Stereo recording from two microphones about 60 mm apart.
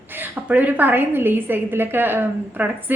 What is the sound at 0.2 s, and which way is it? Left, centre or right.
A woman's voice, right.